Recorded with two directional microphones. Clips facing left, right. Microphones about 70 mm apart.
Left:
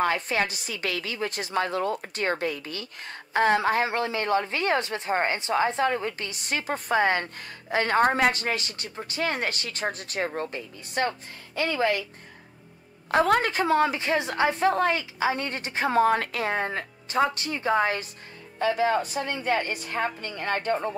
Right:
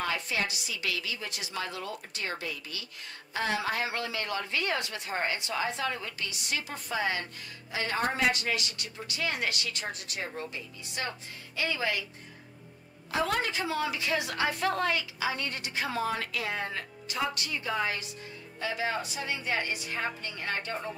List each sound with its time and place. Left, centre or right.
0.0 s a woman's voice: left
13.1 s a woman's voice: left